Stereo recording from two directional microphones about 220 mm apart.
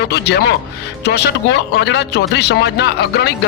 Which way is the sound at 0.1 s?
50° left (ahead or behind).